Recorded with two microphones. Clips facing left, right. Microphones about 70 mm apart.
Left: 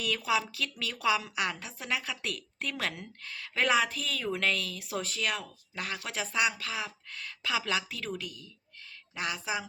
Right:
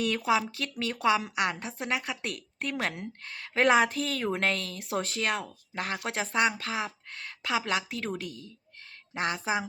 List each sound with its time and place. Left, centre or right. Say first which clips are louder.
0.3 s a woman's voice: right 1 dB; right
5.2 s speech: right 3 dB; right
6.0 s speech: right 4 dB; right
6.6 s speech: right 4 dB; right
8.8 s a sound: right 4 dB; right